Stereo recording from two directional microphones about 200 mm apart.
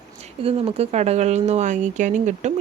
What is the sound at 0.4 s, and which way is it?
A woman's voice, 30° right (ahead or behind).